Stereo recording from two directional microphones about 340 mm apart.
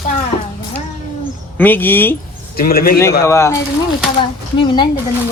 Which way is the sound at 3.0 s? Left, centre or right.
Centre.